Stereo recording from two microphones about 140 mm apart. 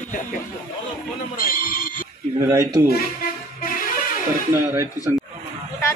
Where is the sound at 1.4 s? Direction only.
90° left.